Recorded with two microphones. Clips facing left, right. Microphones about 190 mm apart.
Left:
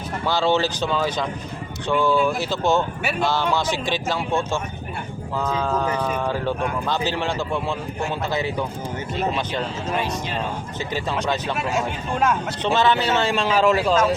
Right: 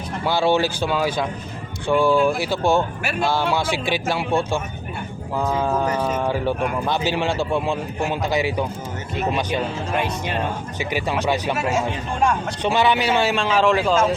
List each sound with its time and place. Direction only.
0.3 s speech: 10° right (ahead or behind)
3.0 s speech: centre (ahead or behind)
3.2 s speech: 10° right (ahead or behind)
9.9 s speech: 55° right (ahead or behind)
10.8 s speech: 10° right (ahead or behind)
12.6 s speech: 10° right (ahead or behind)
13.3 s speech: centre (ahead or behind)